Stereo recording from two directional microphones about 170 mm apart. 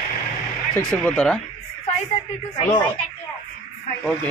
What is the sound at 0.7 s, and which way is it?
Speech, 5° left (ahead or behind).